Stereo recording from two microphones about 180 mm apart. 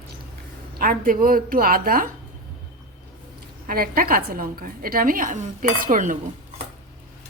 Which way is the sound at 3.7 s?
55° right (ahead or behind).